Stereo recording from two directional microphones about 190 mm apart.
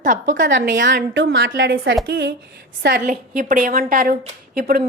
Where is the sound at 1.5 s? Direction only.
60° right (ahead or behind).